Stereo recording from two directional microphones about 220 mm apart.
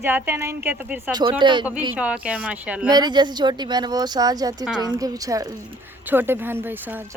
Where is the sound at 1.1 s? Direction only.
20° right (ahead or behind).